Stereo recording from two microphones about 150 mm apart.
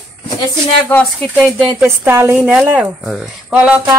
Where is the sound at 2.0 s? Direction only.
15° right (ahead or behind).